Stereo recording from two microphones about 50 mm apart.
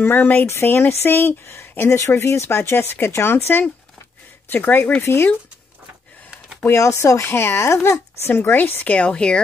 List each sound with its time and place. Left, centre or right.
0.0 s speech: left
0.5 s speech: left
5.0 s speech: left
6.7 s speech: left
8.2 s speech: left
8.8 s speech: left